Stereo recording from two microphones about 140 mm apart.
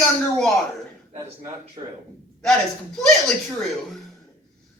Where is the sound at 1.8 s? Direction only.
40° right (ahead or behind).